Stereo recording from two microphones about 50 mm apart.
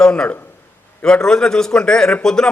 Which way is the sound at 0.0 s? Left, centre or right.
Centre.